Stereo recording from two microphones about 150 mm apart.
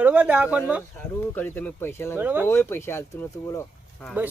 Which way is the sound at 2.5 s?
15° left (ahead or behind).